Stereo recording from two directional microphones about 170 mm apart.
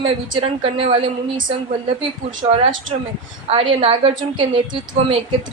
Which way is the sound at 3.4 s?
35° right (ahead or behind).